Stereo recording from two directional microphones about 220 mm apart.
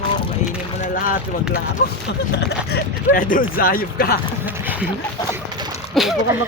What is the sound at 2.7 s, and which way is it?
Speech, 40° left (ahead or behind).